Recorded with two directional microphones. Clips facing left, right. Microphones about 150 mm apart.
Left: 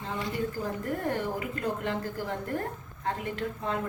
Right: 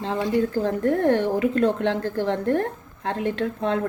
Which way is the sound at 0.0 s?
80° right.